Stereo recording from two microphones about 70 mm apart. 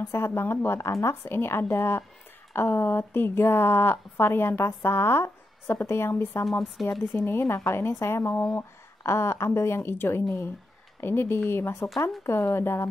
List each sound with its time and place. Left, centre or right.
0.0 s a woman's voice: left
6.6 s speech: centre
7.2 s a woman's voice: left